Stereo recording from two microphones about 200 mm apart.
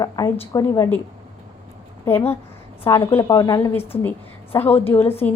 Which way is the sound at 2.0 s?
10° left (ahead or behind).